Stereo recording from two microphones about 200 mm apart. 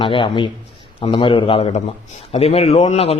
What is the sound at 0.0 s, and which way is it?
A man's voice, 25° left (ahead or behind).